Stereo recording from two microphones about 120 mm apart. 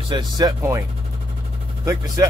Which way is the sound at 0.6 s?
25° right (ahead or behind).